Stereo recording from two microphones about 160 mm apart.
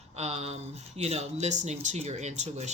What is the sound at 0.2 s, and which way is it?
Speech, 40° right (ahead or behind).